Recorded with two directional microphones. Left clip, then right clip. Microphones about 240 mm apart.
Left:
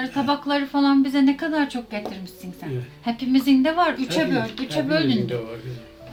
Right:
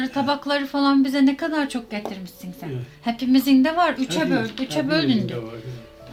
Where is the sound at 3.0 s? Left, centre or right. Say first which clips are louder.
Right 1 dB; right.